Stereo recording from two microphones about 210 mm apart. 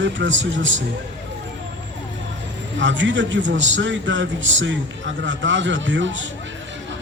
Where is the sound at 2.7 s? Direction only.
60° right (ahead or behind).